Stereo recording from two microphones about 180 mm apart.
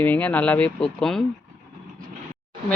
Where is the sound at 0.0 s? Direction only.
10° left (ahead or behind).